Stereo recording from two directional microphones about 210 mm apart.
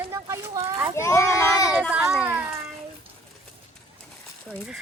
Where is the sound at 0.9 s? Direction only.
15° left (ahead or behind).